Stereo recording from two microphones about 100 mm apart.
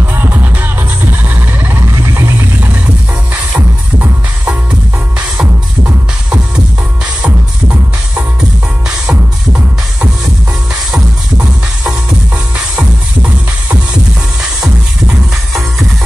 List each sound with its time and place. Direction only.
0.0 s music: 20° right (ahead or behind)
3.5 s music: 15° right (ahead or behind)
8.8 s music: 10° right (ahead or behind)